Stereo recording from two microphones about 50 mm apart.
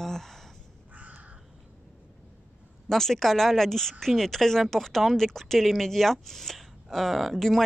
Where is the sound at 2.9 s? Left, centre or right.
Centre.